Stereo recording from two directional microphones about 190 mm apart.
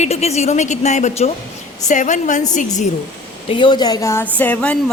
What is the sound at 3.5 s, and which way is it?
A woman's voice, 25° left (ahead or behind).